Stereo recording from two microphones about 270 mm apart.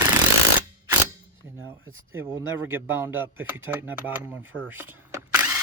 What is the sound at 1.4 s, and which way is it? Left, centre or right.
Speech, centre.